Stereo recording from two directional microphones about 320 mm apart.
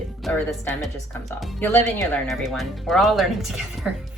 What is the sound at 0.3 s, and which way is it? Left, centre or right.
A woman's voice, centre.